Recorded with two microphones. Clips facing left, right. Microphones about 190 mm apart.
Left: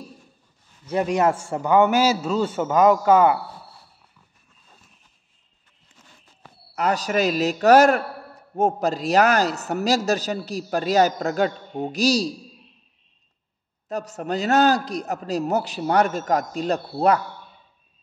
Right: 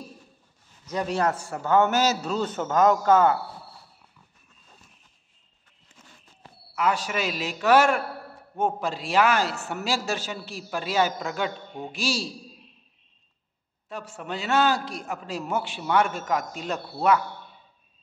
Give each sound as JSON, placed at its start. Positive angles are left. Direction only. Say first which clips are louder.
{"t": 0.9, "sound": "a man's voice", "louder": "left 5 dB", "side_deg": 10}
{"t": 1.2, "sound": "a man's voice", "louder": "left 5 dB", "side_deg": 25}
{"t": 1.7, "sound": "a man's voice", "louder": "left 4 dB", "side_deg": 15}
{"t": 6.7, "sound": "a man's voice", "louder": "left 3 dB", "side_deg": 40}
{"t": 13.8, "sound": "a man's voice", "louder": "left 7 dB", "side_deg": 40}